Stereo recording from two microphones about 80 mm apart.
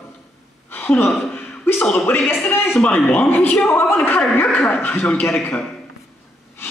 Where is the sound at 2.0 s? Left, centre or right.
Left.